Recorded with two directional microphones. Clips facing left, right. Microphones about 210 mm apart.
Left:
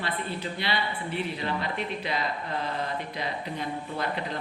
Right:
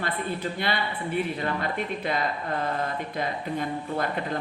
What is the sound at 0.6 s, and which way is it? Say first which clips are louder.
Speech: right 2 dB; 50° right (ahead or behind).